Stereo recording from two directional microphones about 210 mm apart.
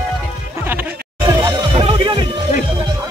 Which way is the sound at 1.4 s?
20° right (ahead or behind).